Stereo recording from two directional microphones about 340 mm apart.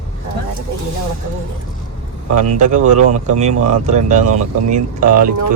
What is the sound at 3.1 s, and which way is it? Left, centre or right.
Speech, right.